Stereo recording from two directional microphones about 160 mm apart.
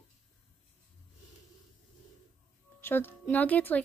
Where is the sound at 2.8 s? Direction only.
15° left (ahead or behind).